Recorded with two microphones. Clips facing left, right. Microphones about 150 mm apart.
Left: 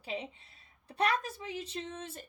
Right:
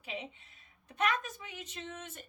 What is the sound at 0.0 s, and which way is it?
A woman's voice, 35° left (ahead or behind).